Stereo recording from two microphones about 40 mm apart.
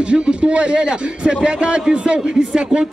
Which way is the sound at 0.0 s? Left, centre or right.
Right.